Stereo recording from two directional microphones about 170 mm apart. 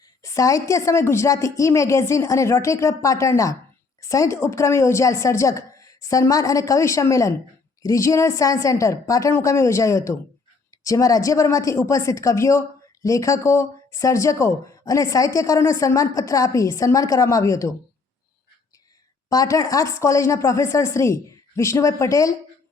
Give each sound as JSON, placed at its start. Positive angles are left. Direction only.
{"t": 0.2, "sound": "a woman's voice", "side_deg": 20}
{"t": 19.3, "sound": "a woman's voice", "side_deg": 20}